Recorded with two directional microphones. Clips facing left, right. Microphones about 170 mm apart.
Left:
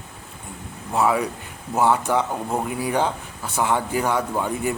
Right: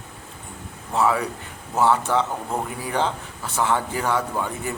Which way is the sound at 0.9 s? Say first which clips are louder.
Left 1 dB; 15° left (ahead or behind).